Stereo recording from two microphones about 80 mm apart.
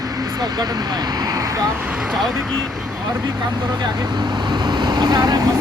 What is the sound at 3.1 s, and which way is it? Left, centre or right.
Speech, right.